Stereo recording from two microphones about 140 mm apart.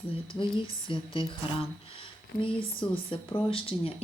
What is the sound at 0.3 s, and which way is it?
Speech, 40° left (ahead or behind).